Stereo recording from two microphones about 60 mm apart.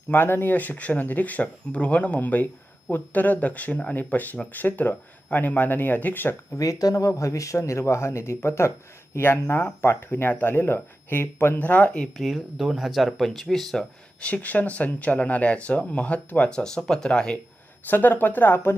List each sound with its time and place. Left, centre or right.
0.1 s speech: left
6.6 s speech: left
7.2 s speech: left
12.1 s speech: centre
14.2 s speech: left
17.8 s speech: left